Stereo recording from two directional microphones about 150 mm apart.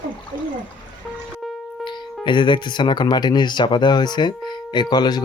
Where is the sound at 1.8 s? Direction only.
35° left (ahead or behind).